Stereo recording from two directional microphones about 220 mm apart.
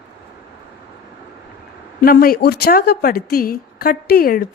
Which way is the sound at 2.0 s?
40° left (ahead or behind).